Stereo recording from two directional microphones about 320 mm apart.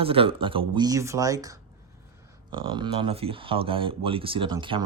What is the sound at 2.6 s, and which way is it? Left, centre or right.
Speech, centre.